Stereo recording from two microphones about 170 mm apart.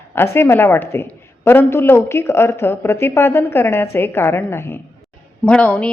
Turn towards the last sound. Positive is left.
turn(degrees=5)  # may be behind; listen again after turning